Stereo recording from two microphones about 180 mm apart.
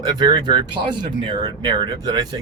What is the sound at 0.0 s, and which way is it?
Speech, 25° right (ahead or behind).